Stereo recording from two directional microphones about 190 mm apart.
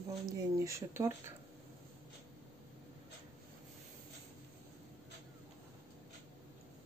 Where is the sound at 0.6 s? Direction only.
15° right (ahead or behind).